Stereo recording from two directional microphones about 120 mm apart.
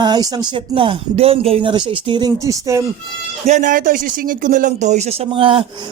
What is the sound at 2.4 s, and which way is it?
Speech, 25° right (ahead or behind).